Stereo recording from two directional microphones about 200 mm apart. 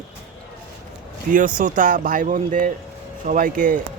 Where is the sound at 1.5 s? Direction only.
40° right (ahead or behind).